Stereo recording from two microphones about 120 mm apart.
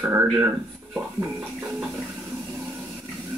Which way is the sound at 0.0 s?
15° right (ahead or behind).